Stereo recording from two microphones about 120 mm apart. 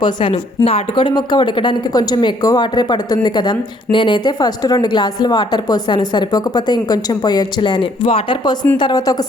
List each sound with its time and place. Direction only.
0.0 s a woman's voice: 45° left (ahead or behind)